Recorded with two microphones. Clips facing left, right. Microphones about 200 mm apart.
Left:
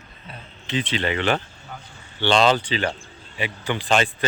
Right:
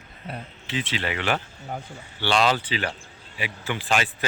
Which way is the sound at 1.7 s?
45° right (ahead or behind).